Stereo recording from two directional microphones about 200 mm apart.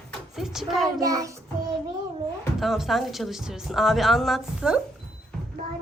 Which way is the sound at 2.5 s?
Centre (ahead or behind).